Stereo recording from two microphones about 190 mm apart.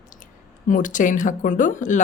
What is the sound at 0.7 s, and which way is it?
Speech, 45° left (ahead or behind).